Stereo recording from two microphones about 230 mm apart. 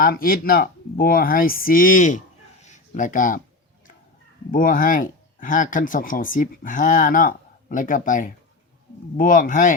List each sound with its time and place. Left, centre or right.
0.0 s speech: left
4.5 s speech: left